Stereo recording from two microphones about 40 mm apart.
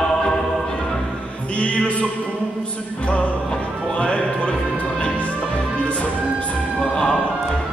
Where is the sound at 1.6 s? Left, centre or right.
Left.